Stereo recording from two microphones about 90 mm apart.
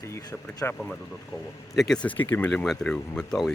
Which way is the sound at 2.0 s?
15° left (ahead or behind).